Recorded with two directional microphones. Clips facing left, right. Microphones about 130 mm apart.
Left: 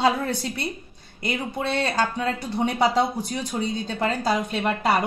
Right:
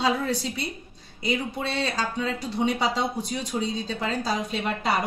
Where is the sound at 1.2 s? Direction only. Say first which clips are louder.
Left 1 dB; 55° left (ahead or behind).